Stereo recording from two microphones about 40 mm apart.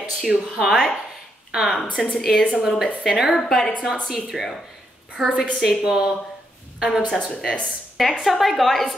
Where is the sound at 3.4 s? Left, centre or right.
Centre.